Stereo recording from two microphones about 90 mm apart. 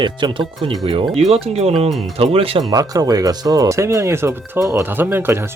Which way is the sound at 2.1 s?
90° right.